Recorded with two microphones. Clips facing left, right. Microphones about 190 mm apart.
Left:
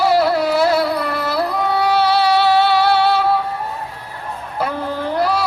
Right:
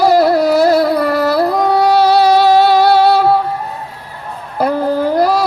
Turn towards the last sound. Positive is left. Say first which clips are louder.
# right 6 dB
turn(degrees=-40)  # may be behind; listen again after turning